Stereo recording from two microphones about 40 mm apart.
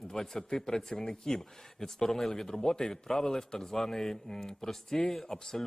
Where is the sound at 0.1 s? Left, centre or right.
Centre.